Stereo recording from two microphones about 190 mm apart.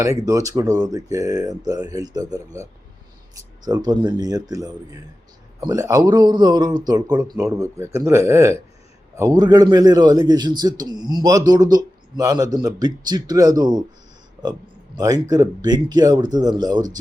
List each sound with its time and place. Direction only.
0.0 s a man's voice: 15° right (ahead or behind)
14.9 s a man's voice: 20° right (ahead or behind)